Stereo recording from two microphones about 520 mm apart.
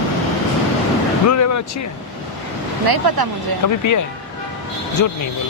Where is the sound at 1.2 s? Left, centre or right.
Left.